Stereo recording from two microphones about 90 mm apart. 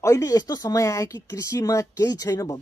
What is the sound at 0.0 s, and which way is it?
Speech, 35° left (ahead or behind).